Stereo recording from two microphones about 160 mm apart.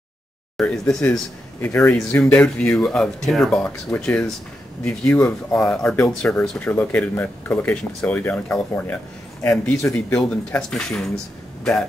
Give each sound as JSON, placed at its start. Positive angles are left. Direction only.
{"t": 0.6, "sound": "speech", "side_deg": 5}